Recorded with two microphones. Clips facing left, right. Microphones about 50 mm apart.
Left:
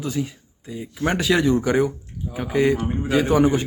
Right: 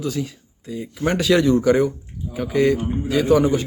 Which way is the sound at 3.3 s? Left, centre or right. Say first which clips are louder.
Right 3 dB; left.